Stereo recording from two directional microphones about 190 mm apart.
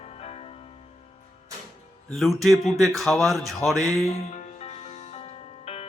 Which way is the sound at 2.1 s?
Centre (ahead or behind).